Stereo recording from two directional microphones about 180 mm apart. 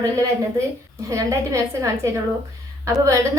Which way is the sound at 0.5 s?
15° right (ahead or behind).